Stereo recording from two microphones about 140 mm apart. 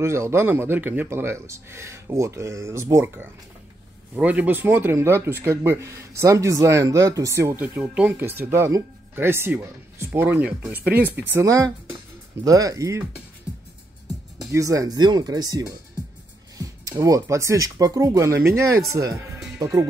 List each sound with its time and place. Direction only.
0.0 s speech: 20° right (ahead or behind)
14.5 s speech: 25° right (ahead or behind)
17.0 s speech: 25° right (ahead or behind)